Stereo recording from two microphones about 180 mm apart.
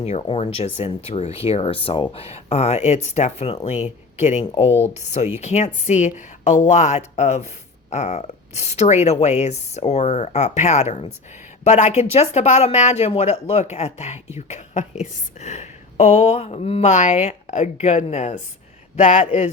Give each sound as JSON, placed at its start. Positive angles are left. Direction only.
{"t": 0.0, "sound": "speech", "side_deg": 35}